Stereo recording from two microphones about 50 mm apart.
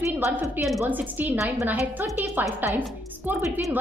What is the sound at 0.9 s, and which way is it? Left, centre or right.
A woman's voice, right.